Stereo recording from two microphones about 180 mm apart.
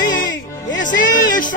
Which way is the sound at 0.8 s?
45° left (ahead or behind).